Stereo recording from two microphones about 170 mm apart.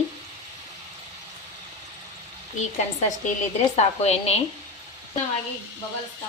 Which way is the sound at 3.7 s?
40° left (ahead or behind).